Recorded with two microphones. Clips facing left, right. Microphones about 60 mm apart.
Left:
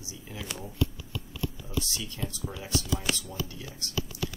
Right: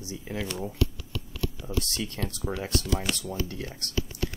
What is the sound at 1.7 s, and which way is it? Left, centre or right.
Speech, right.